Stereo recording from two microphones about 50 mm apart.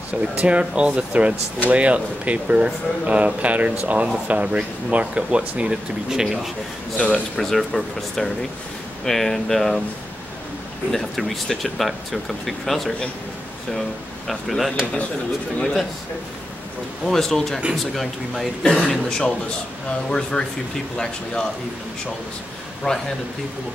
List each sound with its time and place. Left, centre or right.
0.2 s speech: right
7.3 s speech: centre
10.9 s speech: centre
17.0 s speech: centre
18.6 s speech: centre
22.8 s speech: centre